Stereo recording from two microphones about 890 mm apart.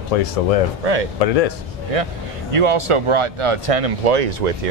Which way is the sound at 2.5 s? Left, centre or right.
Right.